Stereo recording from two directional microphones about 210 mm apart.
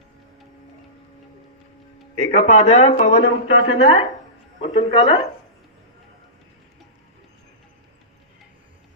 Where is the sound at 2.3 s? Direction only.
30° left (ahead or behind).